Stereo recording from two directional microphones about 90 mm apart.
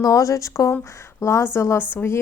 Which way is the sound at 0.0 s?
40° left (ahead or behind).